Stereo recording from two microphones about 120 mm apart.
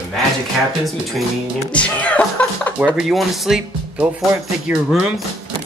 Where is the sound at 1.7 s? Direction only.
10° left (ahead or behind).